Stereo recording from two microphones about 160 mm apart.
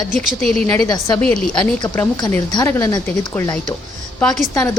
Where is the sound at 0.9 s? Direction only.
25° left (ahead or behind).